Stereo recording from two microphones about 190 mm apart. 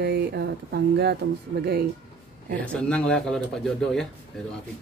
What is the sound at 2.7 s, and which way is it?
Speech, 5° left (ahead or behind).